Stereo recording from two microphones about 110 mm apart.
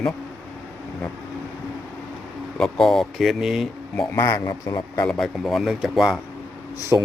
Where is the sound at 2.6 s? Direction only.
Centre (ahead or behind).